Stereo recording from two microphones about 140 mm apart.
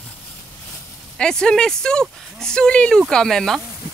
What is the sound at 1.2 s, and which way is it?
Speech, 5° left (ahead or behind).